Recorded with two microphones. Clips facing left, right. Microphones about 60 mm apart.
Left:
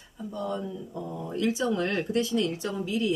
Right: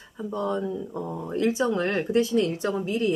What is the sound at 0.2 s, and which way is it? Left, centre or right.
Speech, right.